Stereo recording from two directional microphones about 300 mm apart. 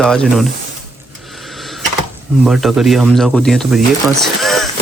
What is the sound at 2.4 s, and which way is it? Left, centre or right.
Speech, centre.